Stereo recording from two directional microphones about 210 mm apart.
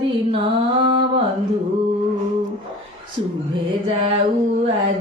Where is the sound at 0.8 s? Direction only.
25° right (ahead or behind).